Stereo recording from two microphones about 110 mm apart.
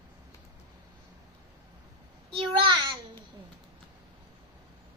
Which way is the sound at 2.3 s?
50° right (ahead or behind).